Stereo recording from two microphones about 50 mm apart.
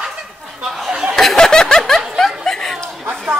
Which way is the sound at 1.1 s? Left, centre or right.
Centre.